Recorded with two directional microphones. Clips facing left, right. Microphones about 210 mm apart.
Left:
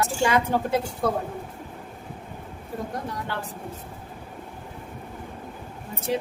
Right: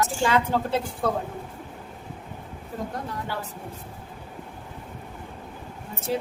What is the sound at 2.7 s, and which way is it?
Speech, 10° left (ahead or behind).